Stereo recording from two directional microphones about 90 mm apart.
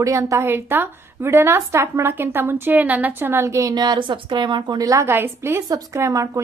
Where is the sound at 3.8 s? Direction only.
60° right (ahead or behind).